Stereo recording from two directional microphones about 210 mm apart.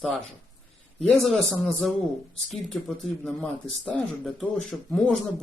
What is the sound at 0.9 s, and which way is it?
Speech, centre (ahead or behind).